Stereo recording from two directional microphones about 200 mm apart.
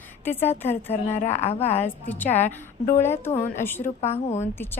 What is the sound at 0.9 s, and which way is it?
Speech, 35° left (ahead or behind).